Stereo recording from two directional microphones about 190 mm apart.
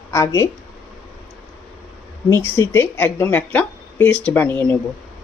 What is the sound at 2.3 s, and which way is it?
Speech, 15° left (ahead or behind).